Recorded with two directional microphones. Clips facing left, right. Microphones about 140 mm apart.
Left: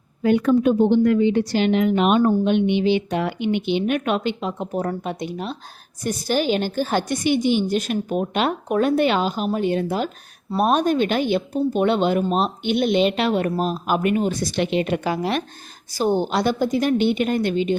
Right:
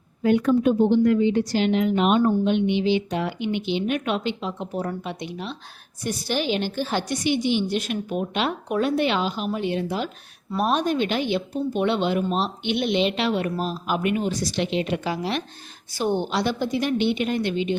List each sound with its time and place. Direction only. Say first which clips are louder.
0.2 s a woman's voice: left 2 dB; 85° left; by 15.4 s 50° left (ahead or behind)
15.9 s a woman's voice: left 4 dB; 40° left (ahead or behind)